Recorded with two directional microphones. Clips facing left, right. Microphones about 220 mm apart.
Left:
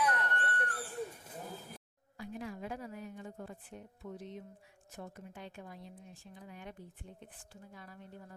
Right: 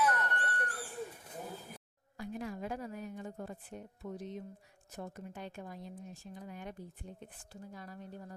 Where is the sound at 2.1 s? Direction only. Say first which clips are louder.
Right 2 dB; 45° right (ahead or behind).